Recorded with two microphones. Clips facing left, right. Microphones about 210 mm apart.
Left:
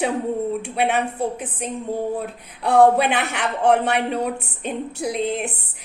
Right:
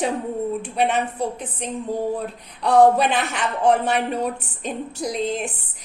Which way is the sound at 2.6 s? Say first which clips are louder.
Even; 60° left (ahead or behind).